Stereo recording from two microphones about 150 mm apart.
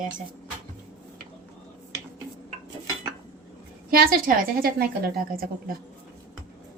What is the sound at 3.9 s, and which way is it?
A woman's voice, 75° right (ahead or behind).